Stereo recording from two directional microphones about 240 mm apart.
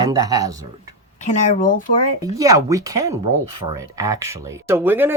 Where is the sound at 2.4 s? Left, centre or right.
Centre.